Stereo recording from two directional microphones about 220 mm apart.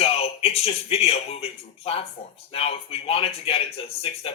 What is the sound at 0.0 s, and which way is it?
Speech, 25° left (ahead or behind).